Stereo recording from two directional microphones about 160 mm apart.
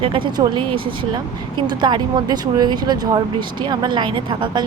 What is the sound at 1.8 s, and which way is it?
Speech, 30° right (ahead or behind).